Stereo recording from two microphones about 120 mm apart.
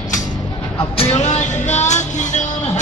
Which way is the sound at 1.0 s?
60° left (ahead or behind).